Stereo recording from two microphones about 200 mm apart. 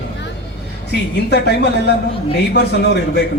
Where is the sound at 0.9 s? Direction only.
55° left (ahead or behind).